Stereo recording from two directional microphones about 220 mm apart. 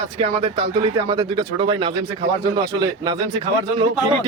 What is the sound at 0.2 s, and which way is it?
Speech, 25° right (ahead or behind).